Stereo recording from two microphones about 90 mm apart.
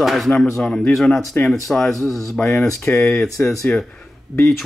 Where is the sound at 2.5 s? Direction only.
30° left (ahead or behind).